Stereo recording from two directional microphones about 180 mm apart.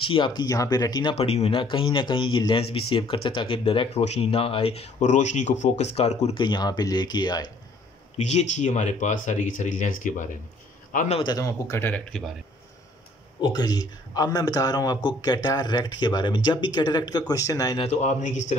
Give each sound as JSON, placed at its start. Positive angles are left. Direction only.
{"t": 0.1, "sound": "speech", "side_deg": 25}
{"t": 1.1, "sound": "speech", "side_deg": 35}
{"t": 8.2, "sound": "a man's voice", "side_deg": 40}
{"t": 11.1, "sound": "speech", "side_deg": 20}
{"t": 13.4, "sound": "speech", "side_deg": 20}
{"t": 17.8, "sound": "speech", "side_deg": 40}